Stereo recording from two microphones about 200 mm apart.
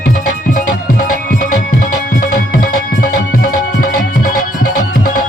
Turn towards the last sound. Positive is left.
turn(degrees=45)  # may be behind; listen again after turning